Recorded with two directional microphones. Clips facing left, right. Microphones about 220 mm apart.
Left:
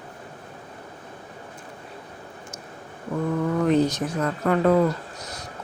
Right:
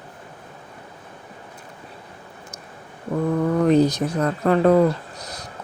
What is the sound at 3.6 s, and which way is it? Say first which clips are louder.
Speech: right 4 dB; 35° right (ahead or behind).